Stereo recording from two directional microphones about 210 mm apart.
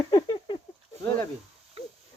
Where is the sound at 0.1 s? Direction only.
25° left (ahead or behind).